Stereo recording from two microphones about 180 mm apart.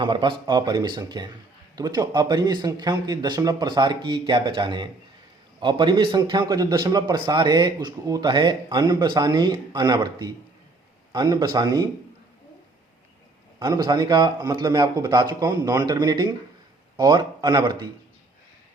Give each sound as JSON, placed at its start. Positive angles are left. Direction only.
{"t": 0.0, "sound": "a man's voice", "side_deg": -25}
{"t": 13.6, "sound": "a man's voice", "side_deg": -25}